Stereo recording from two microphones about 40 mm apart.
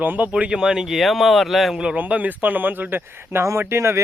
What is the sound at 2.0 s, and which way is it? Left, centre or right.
Speech, right.